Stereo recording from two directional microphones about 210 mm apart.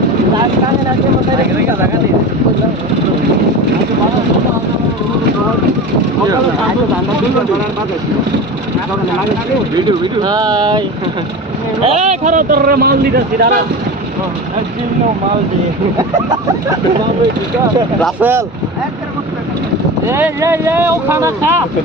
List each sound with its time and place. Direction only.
10.0 s speech: 20° right (ahead or behind); by 13.5 s 50° right (ahead or behind)
18.0 s speech: 10° right (ahead or behind)
20.1 s speech: 10° right (ahead or behind)